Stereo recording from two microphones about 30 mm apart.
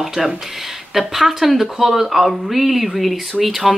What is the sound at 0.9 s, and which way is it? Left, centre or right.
Speech, centre.